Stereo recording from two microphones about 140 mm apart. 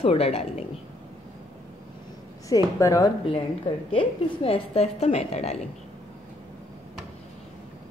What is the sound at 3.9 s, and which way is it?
A woman's voice, 40° left (ahead or behind).